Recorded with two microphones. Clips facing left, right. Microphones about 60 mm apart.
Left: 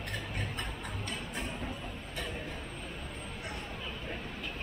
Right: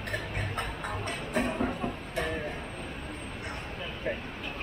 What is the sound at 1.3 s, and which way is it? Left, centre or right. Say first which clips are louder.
Vehicle: right 9 dB; right.